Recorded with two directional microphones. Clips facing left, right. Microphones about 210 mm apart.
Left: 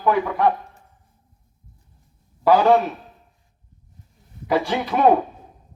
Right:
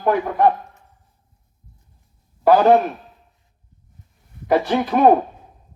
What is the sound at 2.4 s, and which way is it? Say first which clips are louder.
Speech: right 2 dB; 50° right (ahead or behind).